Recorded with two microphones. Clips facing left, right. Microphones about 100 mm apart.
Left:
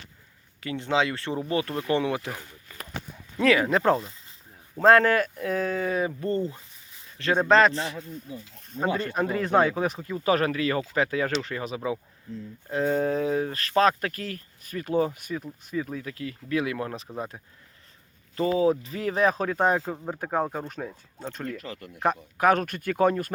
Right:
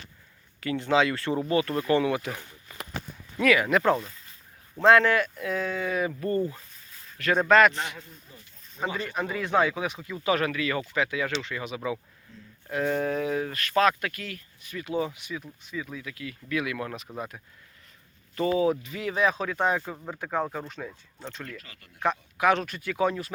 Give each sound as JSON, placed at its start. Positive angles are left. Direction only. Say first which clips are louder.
{"t": 0.6, "sound": "speech", "louder": "right 2 dB", "side_deg": 25}
{"t": 1.3, "sound": "speech", "louder": "right 2 dB", "side_deg": -30}
{"t": 1.5, "sound": "speech", "louder": "right 2 dB", "side_deg": 25}
{"t": 3.4, "sound": "speech", "louder": "left 1 dB", "side_deg": 30}
{"t": 4.8, "sound": "speech", "louder": "left 1 dB", "side_deg": 40}
{"t": 6.1, "sound": "a man's voice", "louder": "even", "side_deg": 25}
{"t": 8.3, "sound": "speech", "louder": "left 11 dB", "side_deg": 85}
{"t": 8.7, "sound": "speech", "louder": "left 4 dB", "side_deg": 45}
{"t": 20.7, "sound": "speech", "louder": "left 3 dB", "side_deg": 45}